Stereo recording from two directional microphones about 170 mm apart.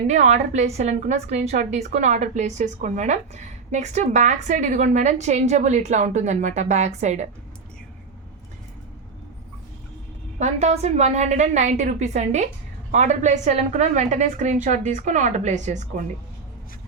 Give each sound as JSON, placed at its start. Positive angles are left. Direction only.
{"t": 0.1, "sound": "a woman's voice", "side_deg": -40}
{"t": 10.3, "sound": "a woman's voice", "side_deg": -40}